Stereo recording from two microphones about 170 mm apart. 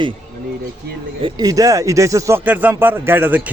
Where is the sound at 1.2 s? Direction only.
20° right (ahead or behind).